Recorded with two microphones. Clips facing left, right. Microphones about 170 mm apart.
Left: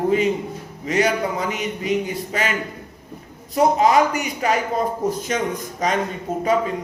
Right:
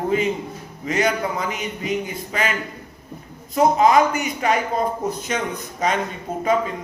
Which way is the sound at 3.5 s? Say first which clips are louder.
Even; 40° left (ahead or behind).